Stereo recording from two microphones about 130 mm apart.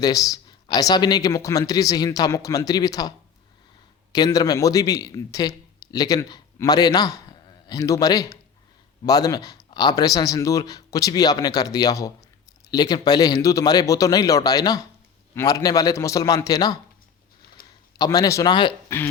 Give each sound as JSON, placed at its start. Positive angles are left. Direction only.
{"t": 0.0, "sound": "speech", "side_deg": 25}
{"t": 4.1, "sound": "a man's voice", "side_deg": 30}
{"t": 17.9, "sound": "a man's voice", "side_deg": 30}